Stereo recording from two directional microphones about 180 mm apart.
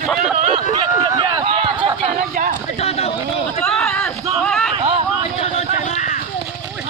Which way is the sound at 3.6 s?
5° left (ahead or behind).